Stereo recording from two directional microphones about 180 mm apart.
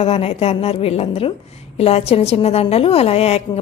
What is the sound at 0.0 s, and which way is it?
A woman's voice, 35° left (ahead or behind).